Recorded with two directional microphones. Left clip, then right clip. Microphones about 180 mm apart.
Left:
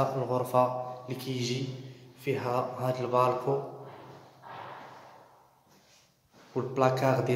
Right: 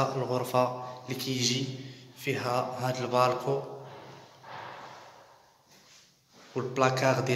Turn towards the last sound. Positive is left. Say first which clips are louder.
# even
turn(degrees=10)  # may be behind; listen again after turning